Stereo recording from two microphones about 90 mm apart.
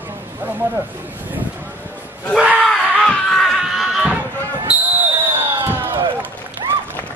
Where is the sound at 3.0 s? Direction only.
5° left (ahead or behind).